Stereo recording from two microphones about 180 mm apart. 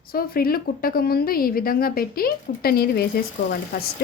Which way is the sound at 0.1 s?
55° left (ahead or behind).